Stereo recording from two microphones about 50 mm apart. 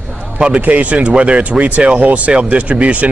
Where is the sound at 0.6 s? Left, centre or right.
Right.